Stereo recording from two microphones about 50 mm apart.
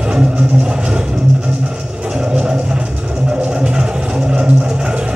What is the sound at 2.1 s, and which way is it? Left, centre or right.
Music, centre.